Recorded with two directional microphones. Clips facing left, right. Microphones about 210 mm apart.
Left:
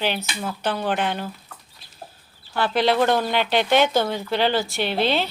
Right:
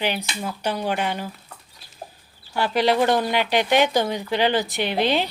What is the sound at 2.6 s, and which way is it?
Speech, 10° right (ahead or behind).